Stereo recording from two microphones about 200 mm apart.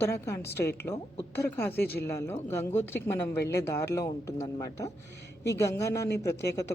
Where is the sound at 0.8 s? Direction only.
15° left (ahead or behind).